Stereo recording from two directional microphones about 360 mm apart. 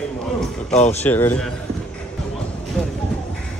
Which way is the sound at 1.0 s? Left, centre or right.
Centre.